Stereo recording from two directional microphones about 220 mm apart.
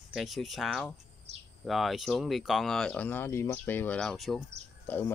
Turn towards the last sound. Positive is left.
turn(degrees=10)  # may be behind; listen again after turning